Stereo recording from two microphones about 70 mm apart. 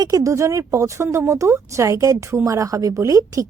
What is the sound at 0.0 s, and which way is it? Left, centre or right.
A woman's voice, right.